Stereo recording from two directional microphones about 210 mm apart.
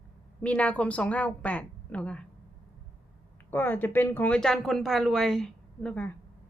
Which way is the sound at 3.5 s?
10° left (ahead or behind).